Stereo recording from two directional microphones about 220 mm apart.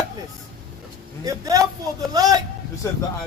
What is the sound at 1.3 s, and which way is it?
Speech, 15° right (ahead or behind).